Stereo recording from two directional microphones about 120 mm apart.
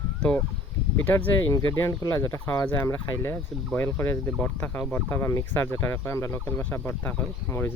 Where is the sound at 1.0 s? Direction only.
15° left (ahead or behind).